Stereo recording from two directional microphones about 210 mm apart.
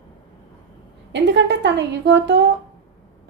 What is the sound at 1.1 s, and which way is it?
A woman's voice, 60° right (ahead or behind).